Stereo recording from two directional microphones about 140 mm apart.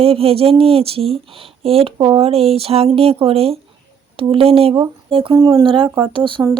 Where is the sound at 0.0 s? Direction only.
45° right (ahead or behind).